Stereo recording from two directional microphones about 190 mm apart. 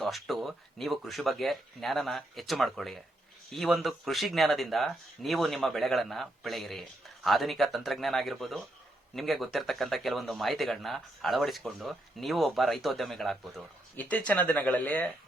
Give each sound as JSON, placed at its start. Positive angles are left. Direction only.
{"t": 0.0, "sound": "speech", "side_deg": 0}